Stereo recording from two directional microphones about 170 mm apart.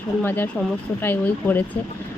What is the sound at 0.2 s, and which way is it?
Speech, 10° left (ahead or behind).